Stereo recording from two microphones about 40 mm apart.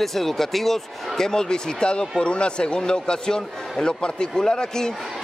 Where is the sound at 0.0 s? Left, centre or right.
Centre.